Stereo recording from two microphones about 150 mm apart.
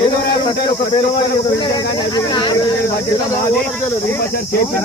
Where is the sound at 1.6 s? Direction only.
25° left (ahead or behind).